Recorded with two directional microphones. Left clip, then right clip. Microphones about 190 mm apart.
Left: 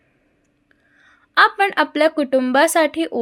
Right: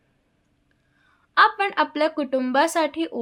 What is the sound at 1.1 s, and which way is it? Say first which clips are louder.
A woman's voice: left 3 dB; 20° left (ahead or behind).